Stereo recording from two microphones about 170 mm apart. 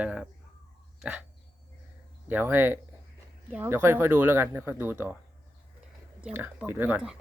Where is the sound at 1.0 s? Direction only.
5° right (ahead or behind).